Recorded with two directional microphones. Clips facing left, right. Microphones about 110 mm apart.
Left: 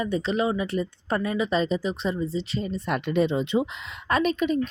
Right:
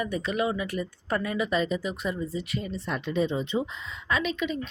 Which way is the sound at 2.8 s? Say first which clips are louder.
Left 4 dB; 65° left (ahead or behind).